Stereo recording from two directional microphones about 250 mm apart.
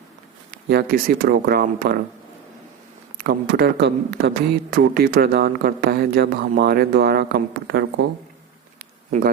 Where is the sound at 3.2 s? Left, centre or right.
Right.